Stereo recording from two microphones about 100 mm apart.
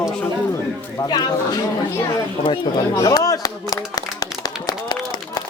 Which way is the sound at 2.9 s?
35° left (ahead or behind).